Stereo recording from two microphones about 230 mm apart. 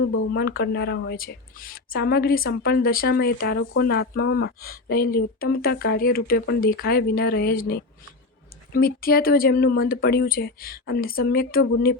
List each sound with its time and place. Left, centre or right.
0.3 s a woman's voice: left